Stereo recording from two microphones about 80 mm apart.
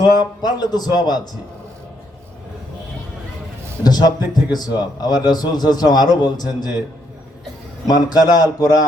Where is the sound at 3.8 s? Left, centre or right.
Left.